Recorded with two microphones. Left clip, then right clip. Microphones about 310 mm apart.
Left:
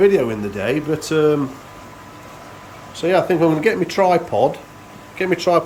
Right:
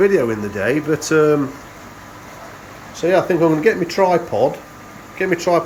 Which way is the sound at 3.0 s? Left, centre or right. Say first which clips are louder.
Right 1 dB; centre.